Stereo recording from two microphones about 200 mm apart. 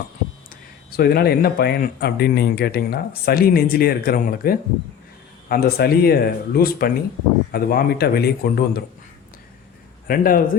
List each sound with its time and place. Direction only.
0.9 s speech: 50° left (ahead or behind)
10.1 s speech: 45° left (ahead or behind)